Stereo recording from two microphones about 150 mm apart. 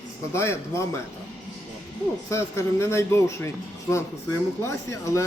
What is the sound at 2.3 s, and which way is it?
Speech, 20° left (ahead or behind).